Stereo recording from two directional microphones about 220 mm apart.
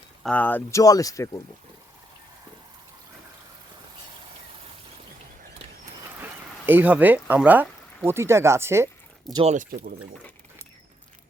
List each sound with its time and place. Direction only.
0.2 s speech: 5° left (ahead or behind)
6.7 s speech: 10° right (ahead or behind)
9.3 s speech: 30° right (ahead or behind)